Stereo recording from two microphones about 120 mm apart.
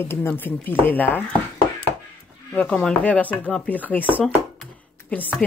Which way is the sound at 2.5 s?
10° left (ahead or behind).